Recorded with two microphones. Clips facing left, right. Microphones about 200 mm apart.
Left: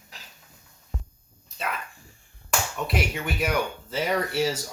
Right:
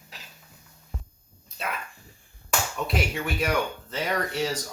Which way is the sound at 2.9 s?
Centre (ahead or behind).